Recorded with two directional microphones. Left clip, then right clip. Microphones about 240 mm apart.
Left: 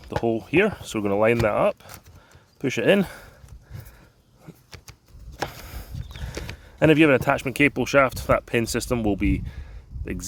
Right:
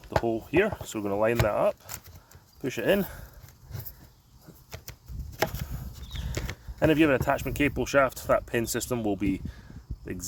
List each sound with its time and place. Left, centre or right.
0.2 s speech: left
6.7 s speech: left